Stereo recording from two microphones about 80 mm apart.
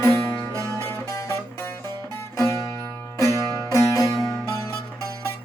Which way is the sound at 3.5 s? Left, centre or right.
Left.